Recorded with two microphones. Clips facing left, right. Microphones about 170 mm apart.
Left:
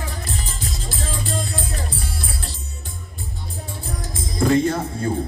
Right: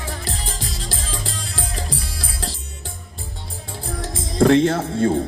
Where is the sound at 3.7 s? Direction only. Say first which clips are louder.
Right 5 dB; 85° right.